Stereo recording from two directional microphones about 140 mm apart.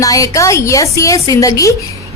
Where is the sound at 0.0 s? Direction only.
25° left (ahead or behind).